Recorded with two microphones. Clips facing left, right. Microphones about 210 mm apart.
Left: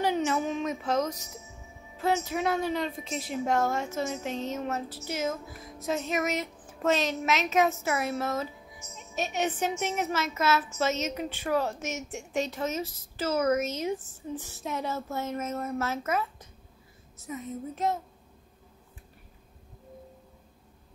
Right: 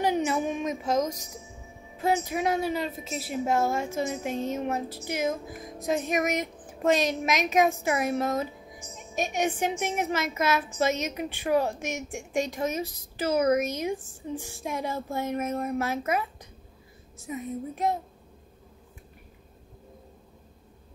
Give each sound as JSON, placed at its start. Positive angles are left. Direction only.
{"t": 0.0, "sound": "music", "side_deg": -15}
{"t": 2.0, "sound": "a woman's voice", "side_deg": -15}